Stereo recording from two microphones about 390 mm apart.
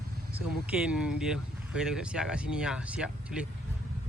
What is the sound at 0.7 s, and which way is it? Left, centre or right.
Speech, centre.